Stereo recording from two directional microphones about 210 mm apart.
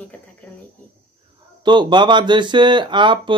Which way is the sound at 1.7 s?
20° right (ahead or behind).